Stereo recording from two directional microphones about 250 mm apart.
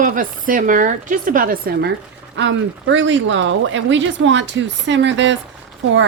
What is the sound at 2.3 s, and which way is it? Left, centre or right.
A woman's voice, right.